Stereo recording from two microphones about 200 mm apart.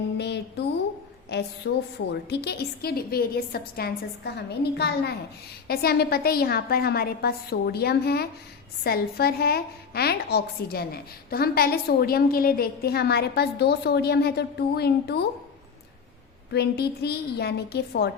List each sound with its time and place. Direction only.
0.2 s music: 55° left (ahead or behind)
1.3 s a woman's voice: 55° left (ahead or behind)
16.5 s a woman's voice: 55° left (ahead or behind)